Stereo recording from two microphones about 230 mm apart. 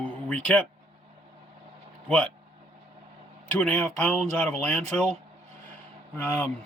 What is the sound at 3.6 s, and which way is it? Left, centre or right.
Speech, centre.